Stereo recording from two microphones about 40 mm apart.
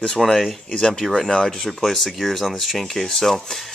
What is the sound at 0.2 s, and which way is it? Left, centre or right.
Speech, centre.